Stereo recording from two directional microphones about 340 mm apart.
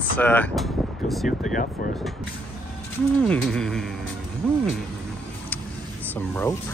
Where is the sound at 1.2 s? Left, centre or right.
Left.